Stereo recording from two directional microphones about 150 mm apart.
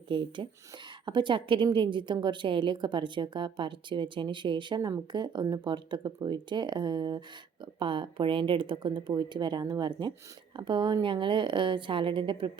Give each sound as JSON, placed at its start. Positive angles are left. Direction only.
{"t": 0.1, "sound": "a woman's voice", "side_deg": -35}